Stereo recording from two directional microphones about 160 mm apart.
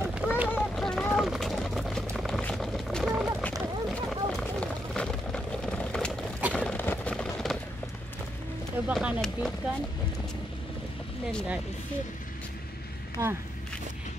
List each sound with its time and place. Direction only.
0.0 s run: 10° right (ahead or behind)
0.6 s run: centre (ahead or behind)
1.1 s a sound: centre (ahead or behind)
8.8 s speech: 5° right (ahead or behind)
13.2 s speech: 20° right (ahead or behind)